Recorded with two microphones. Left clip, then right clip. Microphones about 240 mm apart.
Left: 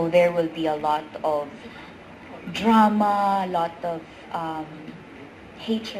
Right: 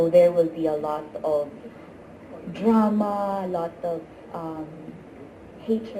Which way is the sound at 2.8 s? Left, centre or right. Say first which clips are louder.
Left 5 dB; left.